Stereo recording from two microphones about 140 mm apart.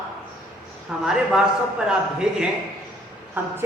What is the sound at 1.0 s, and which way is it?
A man's voice, 5° right (ahead or behind).